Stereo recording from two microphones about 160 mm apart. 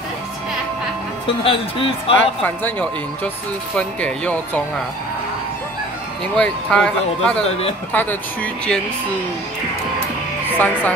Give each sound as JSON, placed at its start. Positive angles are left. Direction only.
{"t": 1.2, "sound": "speech", "side_deg": 35}
{"t": 2.4, "sound": "speech", "side_deg": 10}
{"t": 6.3, "sound": "speech", "side_deg": 5}
{"t": 10.5, "sound": "speech", "side_deg": 10}